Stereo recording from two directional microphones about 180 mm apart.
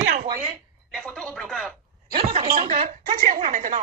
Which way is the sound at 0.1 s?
55° right (ahead or behind).